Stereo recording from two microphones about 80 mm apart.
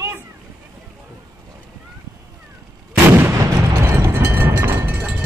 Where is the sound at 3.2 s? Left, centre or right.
Right.